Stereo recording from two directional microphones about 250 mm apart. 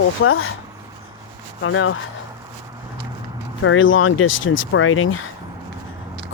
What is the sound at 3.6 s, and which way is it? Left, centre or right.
Speech, left.